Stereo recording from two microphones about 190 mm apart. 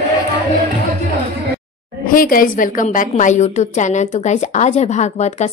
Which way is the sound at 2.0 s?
50° left (ahead or behind).